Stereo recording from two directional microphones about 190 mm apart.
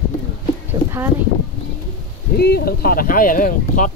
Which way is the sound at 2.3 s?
55° left (ahead or behind).